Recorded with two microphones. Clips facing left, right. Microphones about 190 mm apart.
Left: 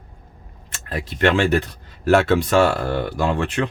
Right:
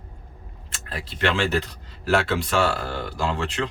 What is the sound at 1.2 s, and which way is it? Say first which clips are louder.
Speech: left 6 dB; 45° left (ahead or behind).